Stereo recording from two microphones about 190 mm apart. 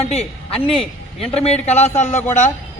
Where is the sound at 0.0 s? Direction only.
30° left (ahead or behind).